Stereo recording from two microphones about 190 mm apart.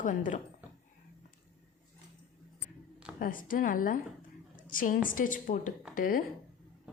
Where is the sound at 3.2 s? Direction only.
45° left (ahead or behind).